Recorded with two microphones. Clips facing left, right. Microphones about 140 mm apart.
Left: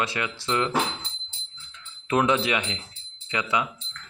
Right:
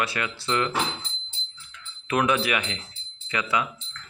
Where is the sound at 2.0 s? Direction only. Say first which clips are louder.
Left 1 dB; 25° left (ahead or behind).